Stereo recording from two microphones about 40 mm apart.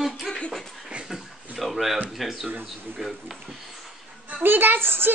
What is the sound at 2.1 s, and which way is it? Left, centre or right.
A man's voice, centre.